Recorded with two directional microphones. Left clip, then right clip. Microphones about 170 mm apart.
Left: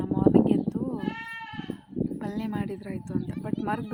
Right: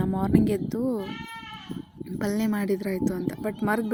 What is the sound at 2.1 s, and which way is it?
Speech, 30° right (ahead or behind).